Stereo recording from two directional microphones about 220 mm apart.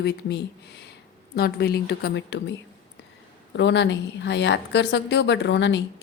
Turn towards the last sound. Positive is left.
turn(degrees=55)  # may be behind; listen again after turning